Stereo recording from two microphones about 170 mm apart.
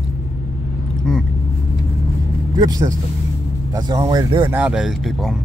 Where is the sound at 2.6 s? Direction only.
20° right (ahead or behind).